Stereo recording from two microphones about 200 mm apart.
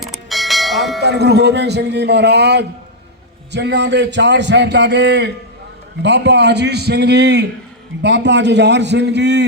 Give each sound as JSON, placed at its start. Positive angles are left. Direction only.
{"t": 0.0, "sound": "bell", "side_deg": 0}
{"t": 1.0, "sound": "a man's voice", "side_deg": -55}